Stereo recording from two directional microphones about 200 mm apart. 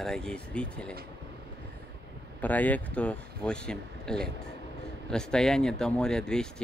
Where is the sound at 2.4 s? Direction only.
10° left (ahead or behind).